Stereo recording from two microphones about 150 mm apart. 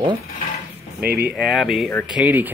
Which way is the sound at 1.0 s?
90° right.